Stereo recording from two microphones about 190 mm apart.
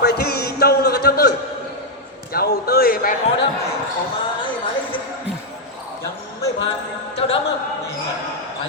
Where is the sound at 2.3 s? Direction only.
55° left (ahead or behind).